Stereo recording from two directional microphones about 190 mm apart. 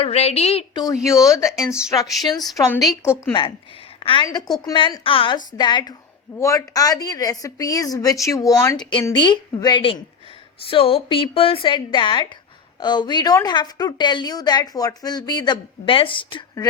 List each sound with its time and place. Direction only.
0.0 s a woman's voice: 35° left (ahead or behind); by 1.5 s 15° left (ahead or behind)
1.5 s speech: 5° right (ahead or behind)
2.9 s a woman's voice: 15° left (ahead or behind)
4.0 s a woman's voice: 25° left (ahead or behind)